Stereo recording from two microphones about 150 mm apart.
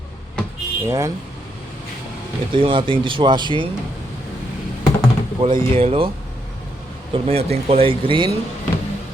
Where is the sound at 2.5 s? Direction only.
35° right (ahead or behind).